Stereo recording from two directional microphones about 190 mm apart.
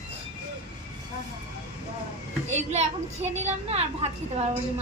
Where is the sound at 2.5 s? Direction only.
35° right (ahead or behind).